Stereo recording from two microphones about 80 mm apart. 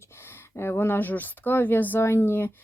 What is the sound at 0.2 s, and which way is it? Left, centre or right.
Speech, left.